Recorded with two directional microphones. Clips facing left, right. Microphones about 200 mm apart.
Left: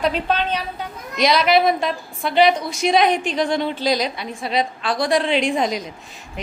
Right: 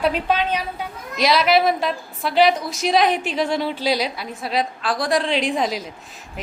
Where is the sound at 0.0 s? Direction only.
10° right (ahead or behind).